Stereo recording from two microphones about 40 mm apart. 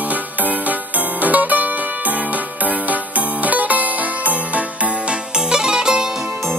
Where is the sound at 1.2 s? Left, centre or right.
Right.